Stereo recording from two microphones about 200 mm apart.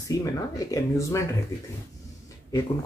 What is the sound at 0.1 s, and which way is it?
Speech, 15° left (ahead or behind).